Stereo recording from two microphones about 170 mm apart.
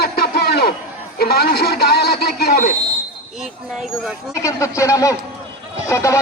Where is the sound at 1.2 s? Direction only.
65° left (ahead or behind).